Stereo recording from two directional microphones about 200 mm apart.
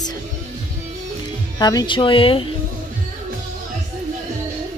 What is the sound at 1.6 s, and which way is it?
Speech, 20° left (ahead or behind).